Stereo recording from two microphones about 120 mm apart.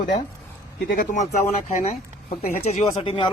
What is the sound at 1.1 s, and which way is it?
Speech, 75° left (ahead or behind).